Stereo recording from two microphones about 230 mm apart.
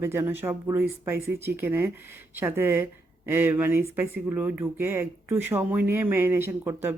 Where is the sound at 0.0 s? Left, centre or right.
Centre.